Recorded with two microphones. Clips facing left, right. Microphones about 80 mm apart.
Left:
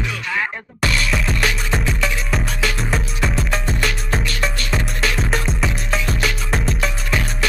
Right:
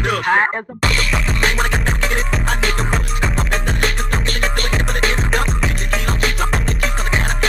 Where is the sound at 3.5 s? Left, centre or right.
Right.